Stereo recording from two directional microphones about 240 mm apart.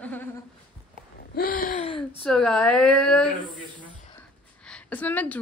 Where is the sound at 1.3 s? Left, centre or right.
Left.